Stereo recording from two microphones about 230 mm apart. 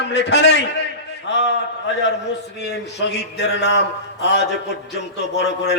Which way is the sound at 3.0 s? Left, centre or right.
Left.